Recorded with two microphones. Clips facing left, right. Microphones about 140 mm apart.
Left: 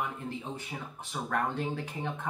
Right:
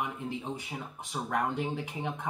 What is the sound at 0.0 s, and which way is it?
Speech, 15° right (ahead or behind).